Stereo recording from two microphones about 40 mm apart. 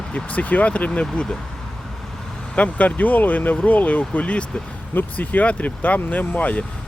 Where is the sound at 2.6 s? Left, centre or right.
Left.